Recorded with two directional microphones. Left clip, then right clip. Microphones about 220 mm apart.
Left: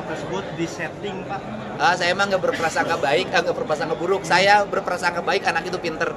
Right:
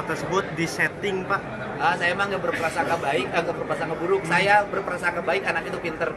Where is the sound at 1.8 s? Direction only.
55° left (ahead or behind).